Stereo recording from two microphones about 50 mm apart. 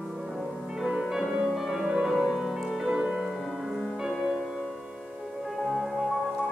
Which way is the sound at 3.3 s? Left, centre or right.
Centre.